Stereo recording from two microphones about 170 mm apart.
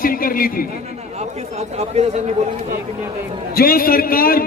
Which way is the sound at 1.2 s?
40° right (ahead or behind).